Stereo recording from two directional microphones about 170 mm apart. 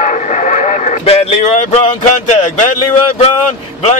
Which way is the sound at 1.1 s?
40° left (ahead or behind).